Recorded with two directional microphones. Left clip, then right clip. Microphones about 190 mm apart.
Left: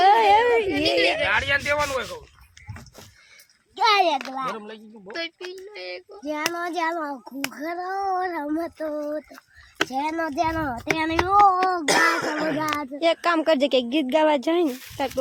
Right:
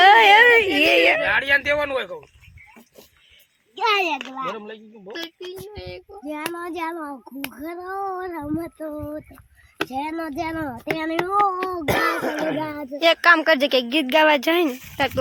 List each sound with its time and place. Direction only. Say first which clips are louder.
0.0 s a sound: right 5 dB; centre (ahead or behind)
0.8 s a sound: right 5 dB; 10° right (ahead or behind)
1.2 s a sound: right 3 dB; 40° right (ahead or behind)
4.0 s a child's voice: left 2 dB; 30° left (ahead or behind)
4.5 s speech: right 2 dB; 35° right (ahead or behind)
5.7 s child singing: left 2 dB; 60° right (ahead or behind)
6.2 s a child's voice: left 3 dB; 10° left (ahead or behind)
9.7 s speech: left 2 dB; 5° right (ahead or behind)
11.9 s music: right 2 dB; 55° right (ahead or behind)
12.5 s a child's voice: left 1 dB; 5° left (ahead or behind)